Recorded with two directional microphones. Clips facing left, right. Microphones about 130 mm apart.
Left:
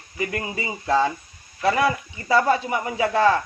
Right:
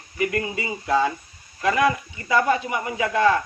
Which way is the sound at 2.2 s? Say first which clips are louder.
Left 1 dB; 35° left (ahead or behind).